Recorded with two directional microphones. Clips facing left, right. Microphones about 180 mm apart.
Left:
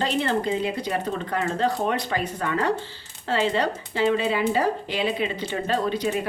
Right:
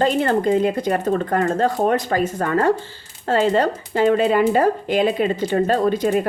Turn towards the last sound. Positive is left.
turn(degrees=-50)  # may be behind; listen again after turning